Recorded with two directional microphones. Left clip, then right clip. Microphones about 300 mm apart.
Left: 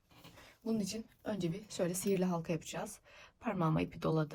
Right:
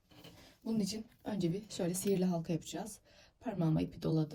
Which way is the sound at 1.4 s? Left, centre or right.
Centre.